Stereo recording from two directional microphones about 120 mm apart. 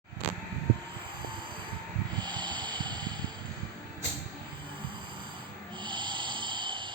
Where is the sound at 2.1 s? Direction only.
40° right (ahead or behind).